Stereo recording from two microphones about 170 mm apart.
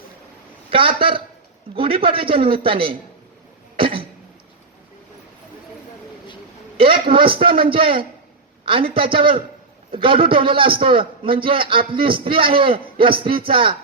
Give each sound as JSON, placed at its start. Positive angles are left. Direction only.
{"t": 0.7, "sound": "a man's voice", "side_deg": -30}
{"t": 3.8, "sound": "cough", "side_deg": -30}
{"t": 7.1, "sound": "a man's voice", "side_deg": -30}